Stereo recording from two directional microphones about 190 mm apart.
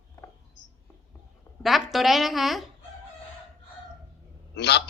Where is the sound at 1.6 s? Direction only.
Centre (ahead or behind).